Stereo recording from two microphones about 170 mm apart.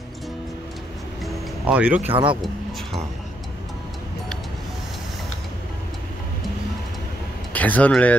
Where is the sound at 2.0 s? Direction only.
30° right (ahead or behind).